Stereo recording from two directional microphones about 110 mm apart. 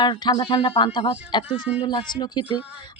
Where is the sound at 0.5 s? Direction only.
60° left (ahead or behind).